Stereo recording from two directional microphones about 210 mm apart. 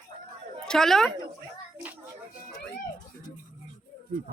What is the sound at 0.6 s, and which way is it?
Speech, centre (ahead or behind).